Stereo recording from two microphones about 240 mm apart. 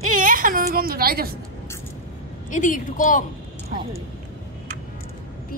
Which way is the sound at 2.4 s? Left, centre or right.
Left.